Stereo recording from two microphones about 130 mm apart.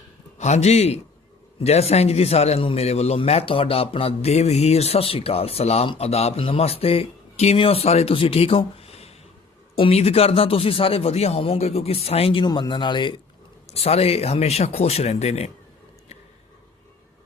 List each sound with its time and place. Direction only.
0.3 s a man's voice: 60° left (ahead or behind); by 13.2 s 40° left (ahead or behind)
13.7 s a man's voice: 50° left (ahead or behind)